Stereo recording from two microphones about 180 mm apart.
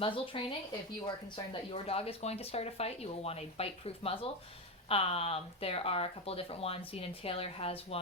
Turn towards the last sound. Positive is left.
turn(degrees=30)  # may be behind; listen again after turning